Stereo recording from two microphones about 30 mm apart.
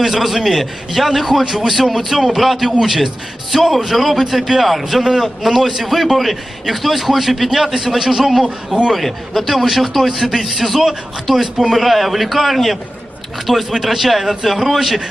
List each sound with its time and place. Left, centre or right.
0.0 s a man's voice: centre
8.4 s speech: right
8.9 s a man's voice: centre
11.7 s a man's voice: centre